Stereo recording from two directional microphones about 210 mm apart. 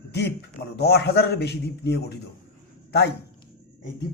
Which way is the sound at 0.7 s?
50° left (ahead or behind).